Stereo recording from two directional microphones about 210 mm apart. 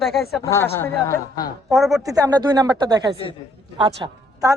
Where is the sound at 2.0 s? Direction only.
15° right (ahead or behind).